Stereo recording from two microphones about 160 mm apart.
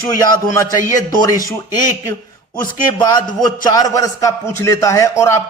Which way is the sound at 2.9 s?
25° left (ahead or behind).